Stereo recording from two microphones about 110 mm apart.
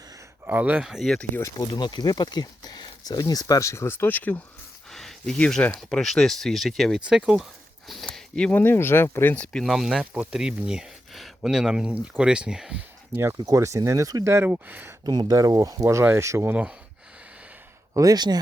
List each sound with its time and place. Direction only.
0.4 s speech: 15° right (ahead or behind); by 1.3 s 5° left (ahead or behind)
1.4 s speech: 30° left (ahead or behind); by 4.4 s 15° left (ahead or behind)
4.9 s speech: 5° left (ahead or behind)
7.0 s speech: 10° right (ahead or behind)
7.9 s a sound: 5° left (ahead or behind)
8.6 s speech: 20° left (ahead or behind); by 12.8 s 5° right (ahead or behind)
13.4 s speech: 30° right (ahead or behind)
15.0 s speech: 40° right (ahead or behind)
16.5 s speech: 10° right (ahead or behind)
17.9 s speech: 35° right (ahead or behind)